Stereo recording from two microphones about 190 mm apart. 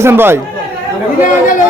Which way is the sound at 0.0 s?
10° right (ahead or behind).